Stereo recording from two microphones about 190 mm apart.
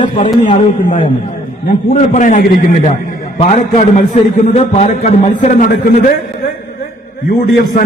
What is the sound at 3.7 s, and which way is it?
A man's voice, 45° left (ahead or behind).